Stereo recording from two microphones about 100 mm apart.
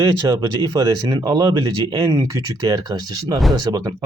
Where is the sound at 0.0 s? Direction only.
40° right (ahead or behind).